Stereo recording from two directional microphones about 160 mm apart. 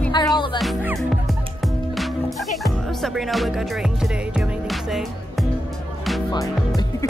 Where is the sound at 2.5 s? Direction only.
Centre (ahead or behind).